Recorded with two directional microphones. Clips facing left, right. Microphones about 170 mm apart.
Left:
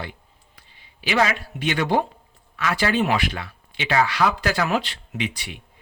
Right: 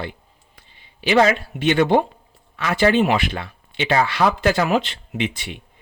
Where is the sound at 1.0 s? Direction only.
30° right (ahead or behind).